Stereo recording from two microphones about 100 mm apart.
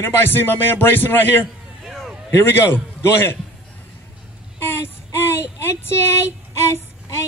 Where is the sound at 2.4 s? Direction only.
20° left (ahead or behind).